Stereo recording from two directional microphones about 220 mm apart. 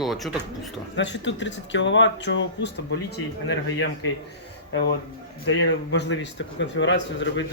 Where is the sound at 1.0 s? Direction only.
55° left (ahead or behind).